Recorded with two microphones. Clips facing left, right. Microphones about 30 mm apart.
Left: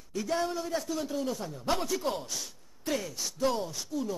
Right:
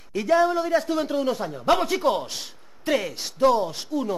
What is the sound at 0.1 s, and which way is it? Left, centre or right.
A man's voice, right.